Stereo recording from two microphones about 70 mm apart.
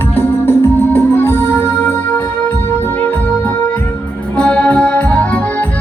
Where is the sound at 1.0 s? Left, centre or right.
Left.